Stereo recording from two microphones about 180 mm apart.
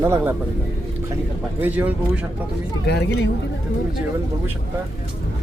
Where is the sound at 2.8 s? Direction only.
65° left (ahead or behind).